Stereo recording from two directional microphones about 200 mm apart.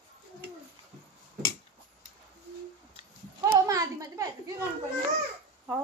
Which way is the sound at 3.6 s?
15° right (ahead or behind).